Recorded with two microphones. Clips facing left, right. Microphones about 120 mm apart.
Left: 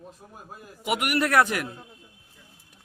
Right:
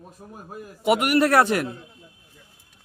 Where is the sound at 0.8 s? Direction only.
35° right (ahead or behind).